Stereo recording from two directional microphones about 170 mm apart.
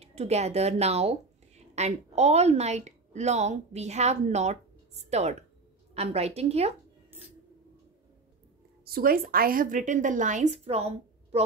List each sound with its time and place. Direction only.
0.0 s a woman's voice: 40° right (ahead or behind)
8.8 s a woman's voice: 60° right (ahead or behind); by 10.8 s 40° right (ahead or behind)